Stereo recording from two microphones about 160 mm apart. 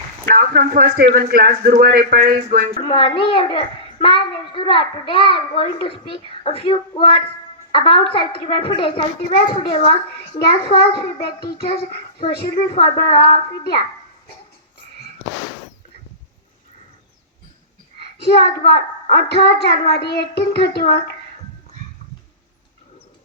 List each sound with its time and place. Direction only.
0.3 s a man's voice: 60° right (ahead or behind)
2.9 s a child's voice: 35° left (ahead or behind)
10.3 s child singing: 80° left
11.5 s a woman's voice: 75° left (ahead or behind)
18.2 s a child's voice: 90° left